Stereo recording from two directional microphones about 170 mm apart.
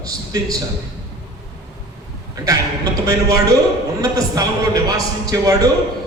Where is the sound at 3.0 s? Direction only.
20° right (ahead or behind).